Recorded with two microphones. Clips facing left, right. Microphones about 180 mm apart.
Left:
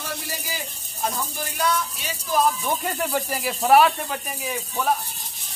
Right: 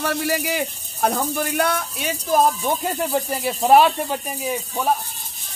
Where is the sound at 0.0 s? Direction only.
70° right (ahead or behind); by 2.4 s 50° right (ahead or behind).